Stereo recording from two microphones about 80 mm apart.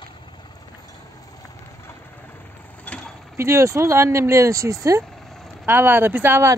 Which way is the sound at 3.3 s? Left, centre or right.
Right.